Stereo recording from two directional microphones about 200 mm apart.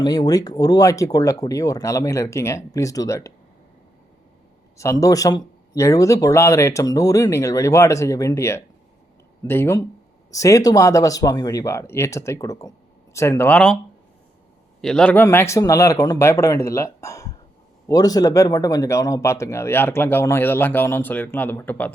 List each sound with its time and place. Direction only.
0.0 s speech: 20° left (ahead or behind)
4.8 s speech: 15° left (ahead or behind)
14.8 s speech: 5° left (ahead or behind)